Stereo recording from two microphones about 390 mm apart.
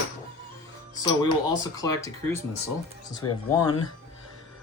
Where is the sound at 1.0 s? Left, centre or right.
Centre.